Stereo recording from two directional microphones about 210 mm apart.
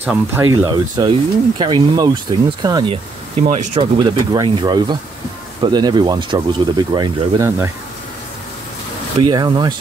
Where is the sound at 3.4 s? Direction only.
35° right (ahead or behind).